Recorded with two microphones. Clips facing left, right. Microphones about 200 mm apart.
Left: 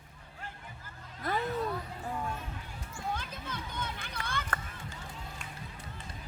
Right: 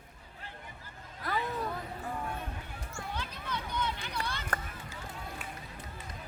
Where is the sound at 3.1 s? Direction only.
50° left (ahead or behind).